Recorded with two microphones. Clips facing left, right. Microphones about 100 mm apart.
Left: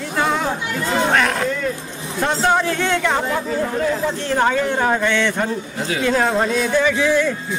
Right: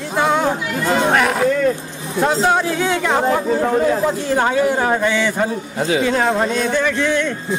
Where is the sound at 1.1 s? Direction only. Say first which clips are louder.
Right 2 dB; 5° right (ahead or behind).